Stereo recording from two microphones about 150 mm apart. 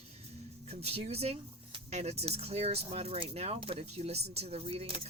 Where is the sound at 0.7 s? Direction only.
45° right (ahead or behind).